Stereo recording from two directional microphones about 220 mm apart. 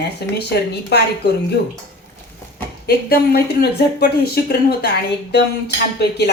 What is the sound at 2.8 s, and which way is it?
Speech, 45° left (ahead or behind).